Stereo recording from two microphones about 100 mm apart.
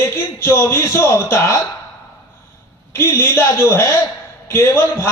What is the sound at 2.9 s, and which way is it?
A man's voice, 25° left (ahead or behind).